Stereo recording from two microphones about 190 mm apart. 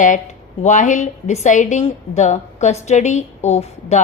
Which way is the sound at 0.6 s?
40° left (ahead or behind).